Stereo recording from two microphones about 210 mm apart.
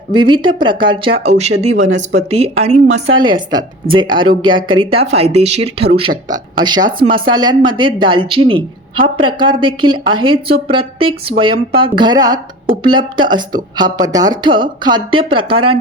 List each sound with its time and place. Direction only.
0.1 s a woman's voice: 25° right (ahead or behind)
3.5 s a woman's voice: 25° right (ahead or behind)